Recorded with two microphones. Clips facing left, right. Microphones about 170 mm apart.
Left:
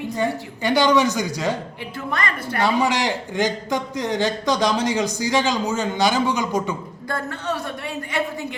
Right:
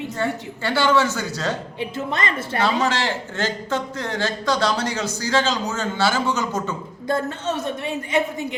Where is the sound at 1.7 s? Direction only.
20° right (ahead or behind).